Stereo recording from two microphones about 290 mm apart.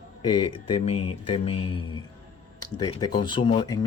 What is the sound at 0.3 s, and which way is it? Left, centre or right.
Speech, left.